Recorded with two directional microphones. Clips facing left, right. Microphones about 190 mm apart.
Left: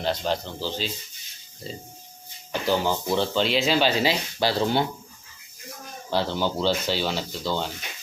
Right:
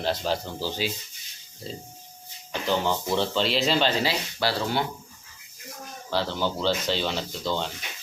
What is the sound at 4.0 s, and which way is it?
Speech, 20° left (ahead or behind).